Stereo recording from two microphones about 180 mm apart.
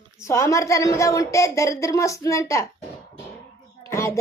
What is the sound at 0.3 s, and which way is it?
A woman's voice, 15° left (ahead or behind).